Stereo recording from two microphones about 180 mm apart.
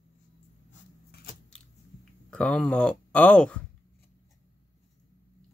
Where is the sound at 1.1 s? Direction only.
55° left (ahead or behind).